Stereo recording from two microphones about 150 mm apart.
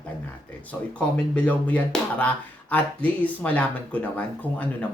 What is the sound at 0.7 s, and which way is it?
Speech, 10° left (ahead or behind).